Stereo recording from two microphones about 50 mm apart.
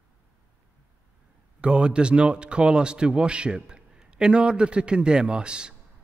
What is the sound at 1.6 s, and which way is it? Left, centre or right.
Speech, centre.